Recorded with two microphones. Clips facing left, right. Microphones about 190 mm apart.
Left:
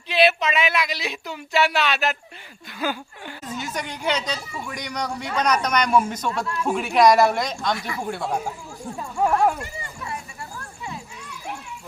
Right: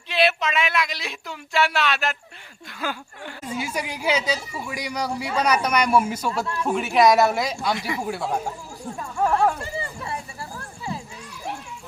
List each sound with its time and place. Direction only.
0.1 s speech: centre (ahead or behind)
3.4 s speech: 10° right (ahead or behind)
7.8 s speech: 20° right (ahead or behind)
8.0 s speech: centre (ahead or behind)
9.0 s speech: 10° left (ahead or behind)
9.6 s a sound: 30° right (ahead or behind)